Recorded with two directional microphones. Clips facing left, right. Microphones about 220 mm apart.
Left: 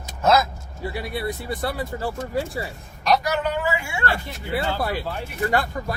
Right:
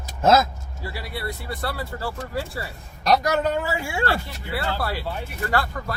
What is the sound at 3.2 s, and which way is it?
Speech, 40° right (ahead or behind).